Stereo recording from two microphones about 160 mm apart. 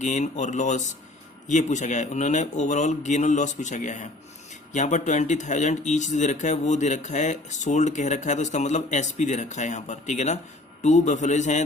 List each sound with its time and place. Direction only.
0.0 s speech: 50° left (ahead or behind)